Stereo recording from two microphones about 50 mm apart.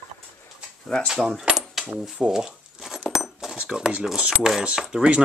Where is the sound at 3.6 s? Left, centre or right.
Centre.